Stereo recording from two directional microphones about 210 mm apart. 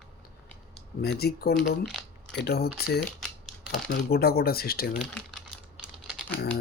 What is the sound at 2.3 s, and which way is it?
Speech, 50° left (ahead or behind).